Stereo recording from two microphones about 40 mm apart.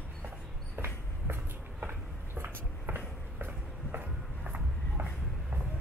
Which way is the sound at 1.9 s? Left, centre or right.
Right.